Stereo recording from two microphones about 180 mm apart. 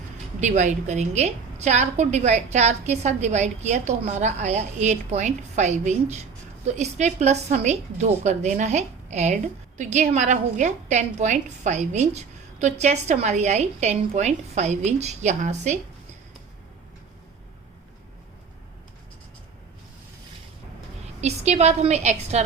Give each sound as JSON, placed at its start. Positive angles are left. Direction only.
{"t": 0.3, "sound": "a woman's voice", "side_deg": -40}
{"t": 21.2, "sound": "a woman's voice", "side_deg": -40}